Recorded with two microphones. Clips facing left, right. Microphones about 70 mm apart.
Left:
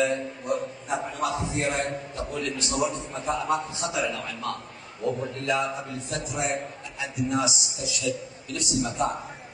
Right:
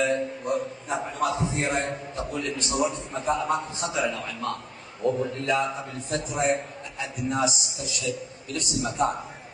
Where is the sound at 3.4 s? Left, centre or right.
Right.